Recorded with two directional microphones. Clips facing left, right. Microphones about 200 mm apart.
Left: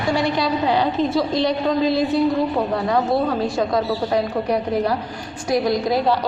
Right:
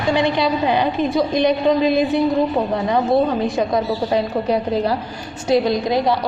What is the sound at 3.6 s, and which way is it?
A woman's voice, 20° right (ahead or behind).